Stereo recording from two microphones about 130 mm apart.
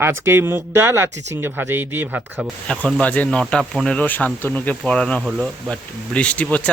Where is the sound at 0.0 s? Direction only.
20° right (ahead or behind).